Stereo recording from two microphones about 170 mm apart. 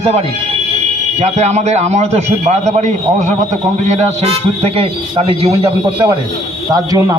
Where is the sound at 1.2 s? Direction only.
45° right (ahead or behind).